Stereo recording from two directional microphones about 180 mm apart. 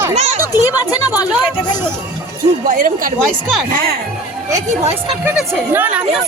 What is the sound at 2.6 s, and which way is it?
Speech, 45° right (ahead or behind).